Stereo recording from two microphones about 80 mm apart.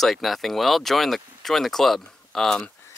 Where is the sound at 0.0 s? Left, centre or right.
Centre.